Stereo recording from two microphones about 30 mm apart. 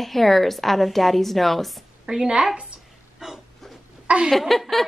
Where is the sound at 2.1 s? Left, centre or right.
Right.